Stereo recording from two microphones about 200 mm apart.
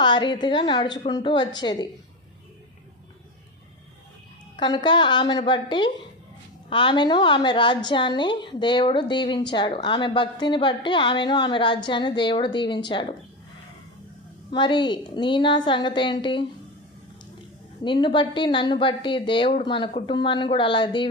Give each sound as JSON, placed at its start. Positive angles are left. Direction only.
{"t": 0.0, "sound": "a woman's voice", "side_deg": 20}
{"t": 4.6, "sound": "a woman's voice", "side_deg": 20}
{"t": 14.5, "sound": "a woman's voice", "side_deg": 25}
{"t": 17.8, "sound": "a woman's voice", "side_deg": 25}